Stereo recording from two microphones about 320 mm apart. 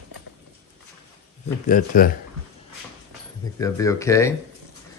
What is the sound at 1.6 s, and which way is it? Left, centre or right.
Speech, left.